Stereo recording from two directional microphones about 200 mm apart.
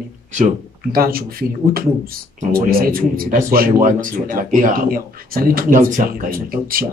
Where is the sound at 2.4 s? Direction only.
45° right (ahead or behind).